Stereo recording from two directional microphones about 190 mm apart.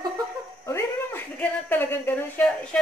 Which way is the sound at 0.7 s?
15° left (ahead or behind).